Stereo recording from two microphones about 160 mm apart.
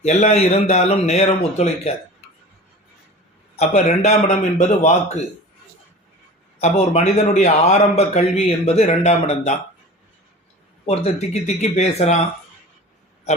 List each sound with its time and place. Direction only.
0.0 s a man's voice: 45° left (ahead or behind)
3.5 s a man's voice: 45° left (ahead or behind)
6.6 s a man's voice: 45° left (ahead or behind)
10.8 s a man's voice: 40° left (ahead or behind)